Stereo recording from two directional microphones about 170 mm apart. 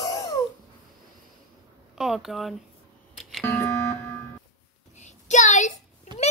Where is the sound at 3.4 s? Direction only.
15° left (ahead or behind).